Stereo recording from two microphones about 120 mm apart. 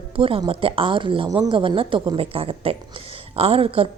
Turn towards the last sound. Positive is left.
turn(degrees=-50)  # may be behind; listen again after turning